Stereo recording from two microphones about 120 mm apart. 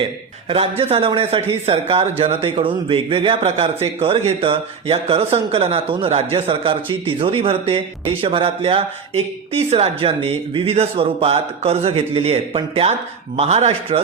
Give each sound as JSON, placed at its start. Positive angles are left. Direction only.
{"t": 0.4, "sound": "speech", "side_deg": -55}
{"t": 3.4, "sound": "a man's voice", "side_deg": -55}